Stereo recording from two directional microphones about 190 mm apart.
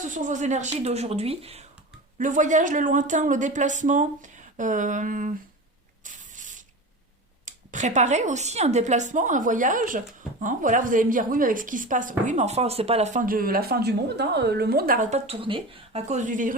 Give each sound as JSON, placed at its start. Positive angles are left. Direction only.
{"t": 0.0, "sound": "speech", "side_deg": -40}
{"t": 6.1, "sound": "a sound", "side_deg": -40}
{"t": 7.4, "sound": "a woman's voice", "side_deg": -40}
{"t": 15.3, "sound": "speech", "side_deg": -25}